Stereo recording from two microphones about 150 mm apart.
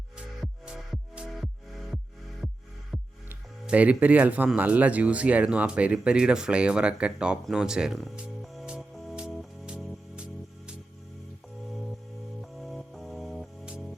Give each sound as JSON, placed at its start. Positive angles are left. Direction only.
{"t": 0.4, "sound": "music", "side_deg": -5}
{"t": 3.2, "sound": "speech", "side_deg": -10}
{"t": 8.2, "sound": "music", "side_deg": -5}
{"t": 12.4, "sound": "music", "side_deg": 0}